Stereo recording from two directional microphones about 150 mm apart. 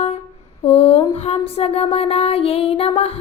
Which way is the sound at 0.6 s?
40° left (ahead or behind).